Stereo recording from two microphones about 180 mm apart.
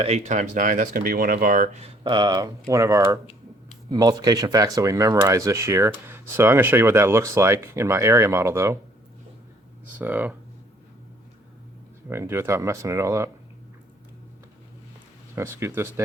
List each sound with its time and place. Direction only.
0.0 s speech: 35° right (ahead or behind)
2.0 s speech: 25° right (ahead or behind)
10.0 s speech: 10° right (ahead or behind)
12.0 s speech: 15° right (ahead or behind)
15.4 s speech: 15° right (ahead or behind)